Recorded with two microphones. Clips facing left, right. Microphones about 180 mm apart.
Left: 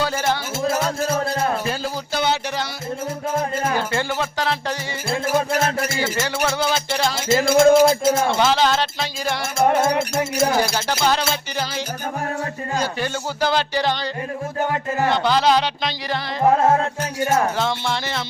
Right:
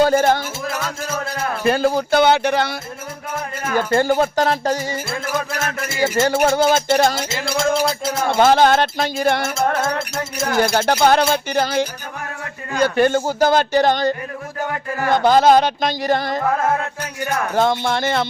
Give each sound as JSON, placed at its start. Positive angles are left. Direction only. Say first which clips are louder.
{"t": 0.0, "sound": "music", "louder": "right 7 dB", "side_deg": -50}
{"t": 0.6, "sound": "music", "louder": "left 5 dB", "side_deg": 30}
{"t": 1.6, "sound": "speech", "louder": "right 9 dB", "side_deg": -60}
{"t": 3.8, "sound": "speech", "louder": "right 7 dB", "side_deg": -45}
{"t": 5.0, "sound": "music", "louder": "left 3 dB", "side_deg": 30}
{"t": 6.0, "sound": "speech", "louder": "right 11 dB", "side_deg": -40}
{"t": 7.3, "sound": "music", "louder": "left 7 dB", "side_deg": 50}
{"t": 8.4, "sound": "speech", "louder": "right 5 dB", "side_deg": -50}
{"t": 10.6, "sound": "speech", "louder": "right 5 dB", "side_deg": -55}
{"t": 15.1, "sound": "speech", "louder": "right 7 dB", "side_deg": -45}
{"t": 16.4, "sound": "music", "louder": "left 3 dB", "side_deg": 25}
{"t": 17.5, "sound": "speech", "louder": "right 5 dB", "side_deg": -50}